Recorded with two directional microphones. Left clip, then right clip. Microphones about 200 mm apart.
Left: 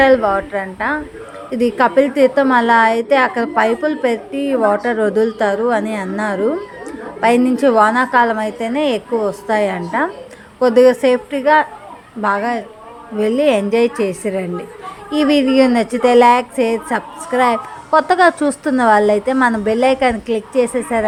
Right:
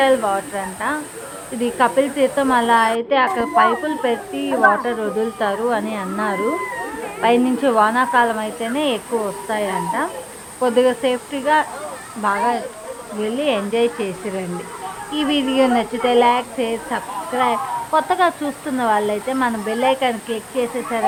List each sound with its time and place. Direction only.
0.0 s a woman's voice: 20° left (ahead or behind)